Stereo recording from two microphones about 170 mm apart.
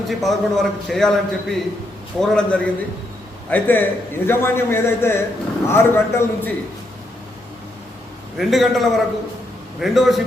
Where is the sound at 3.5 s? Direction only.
10° left (ahead or behind).